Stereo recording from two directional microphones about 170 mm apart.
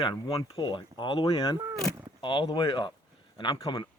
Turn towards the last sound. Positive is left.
turn(degrees=25)  # may be behind; listen again after turning